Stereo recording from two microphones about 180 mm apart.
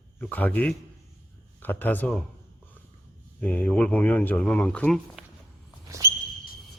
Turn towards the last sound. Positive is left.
turn(degrees=-15)  # may be behind; listen again after turning